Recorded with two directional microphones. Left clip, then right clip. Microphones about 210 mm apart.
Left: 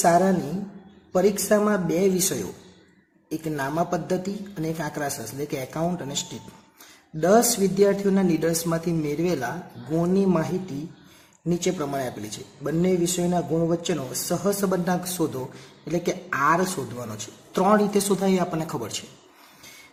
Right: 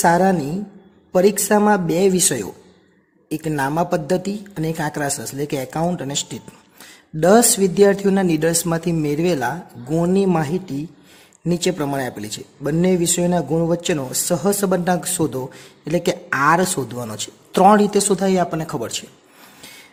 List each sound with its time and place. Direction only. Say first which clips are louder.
0.0 s a man's voice: right 4 dB; 50° right (ahead or behind)